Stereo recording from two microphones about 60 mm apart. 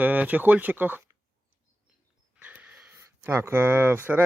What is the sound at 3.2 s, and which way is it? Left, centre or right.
Speech, right.